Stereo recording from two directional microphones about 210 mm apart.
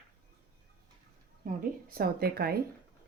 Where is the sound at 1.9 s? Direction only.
45° right (ahead or behind).